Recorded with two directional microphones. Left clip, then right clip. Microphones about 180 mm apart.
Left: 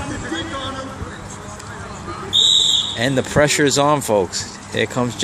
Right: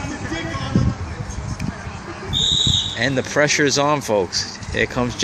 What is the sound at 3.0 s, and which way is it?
Speech, 15° left (ahead or behind).